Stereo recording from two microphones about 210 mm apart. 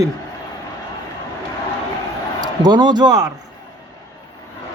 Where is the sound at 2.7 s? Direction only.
20° right (ahead or behind).